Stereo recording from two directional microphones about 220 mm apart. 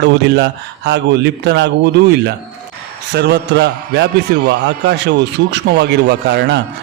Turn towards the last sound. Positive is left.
turn(degrees=-50)  # may be behind; listen again after turning